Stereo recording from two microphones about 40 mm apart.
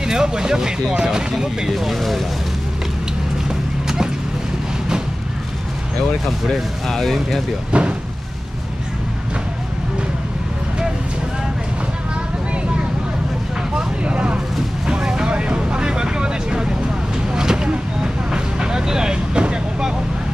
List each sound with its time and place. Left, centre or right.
0.0 s speech: centre
1.7 s speech: centre
3.4 s a sound: centre
6.9 s speech: centre
7.7 s speech: right
13.7 s vehicle: right
14.9 s vehicle: centre
17.3 s a sound: centre
17.6 s vehicle: right